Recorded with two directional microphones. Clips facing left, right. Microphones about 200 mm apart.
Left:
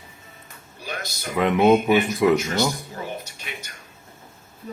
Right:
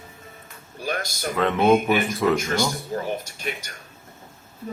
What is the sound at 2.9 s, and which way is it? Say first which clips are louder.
Speech: right 6 dB; 45° right (ahead or behind).